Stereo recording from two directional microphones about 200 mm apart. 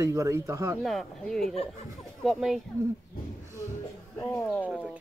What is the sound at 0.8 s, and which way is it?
Speech, centre (ahead or behind).